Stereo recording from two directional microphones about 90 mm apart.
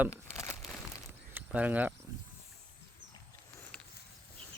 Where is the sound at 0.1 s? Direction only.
35° left (ahead or behind).